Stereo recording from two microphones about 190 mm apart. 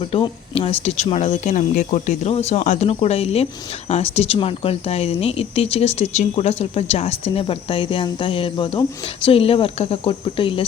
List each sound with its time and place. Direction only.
0.0 s speech: 30° left (ahead or behind)